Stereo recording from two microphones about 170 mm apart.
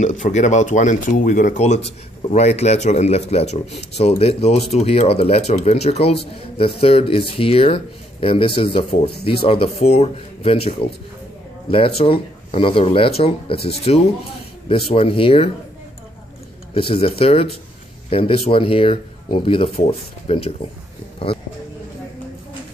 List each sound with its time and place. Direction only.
0.0 s speech: 45° left (ahead or behind)
12.0 s speech: 35° left (ahead or behind)
16.7 s speech: 35° left (ahead or behind)